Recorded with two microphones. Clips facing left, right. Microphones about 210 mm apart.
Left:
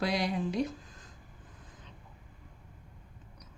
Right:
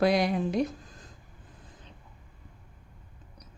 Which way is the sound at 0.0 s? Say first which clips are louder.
Right 6 dB; 50° right (ahead or behind).